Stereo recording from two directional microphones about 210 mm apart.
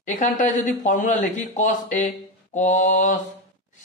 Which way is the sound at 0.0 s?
35° left (ahead or behind).